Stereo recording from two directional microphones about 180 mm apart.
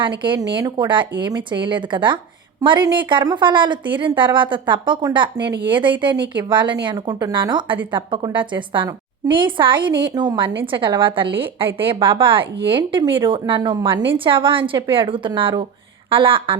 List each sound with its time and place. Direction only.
0.0 s a woman's voice: 25° right (ahead or behind)